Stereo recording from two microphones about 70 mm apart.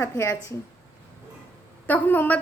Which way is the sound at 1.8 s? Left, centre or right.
Left.